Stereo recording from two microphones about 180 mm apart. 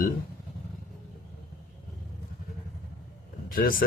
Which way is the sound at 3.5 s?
50° left (ahead or behind).